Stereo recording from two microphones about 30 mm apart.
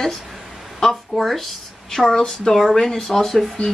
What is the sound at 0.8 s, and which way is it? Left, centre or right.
Speech, centre.